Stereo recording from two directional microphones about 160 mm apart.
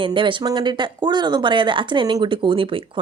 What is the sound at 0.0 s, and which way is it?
Speech, 30° right (ahead or behind).